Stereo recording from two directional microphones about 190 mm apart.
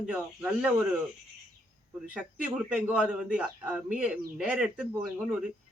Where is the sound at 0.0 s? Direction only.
5° right (ahead or behind).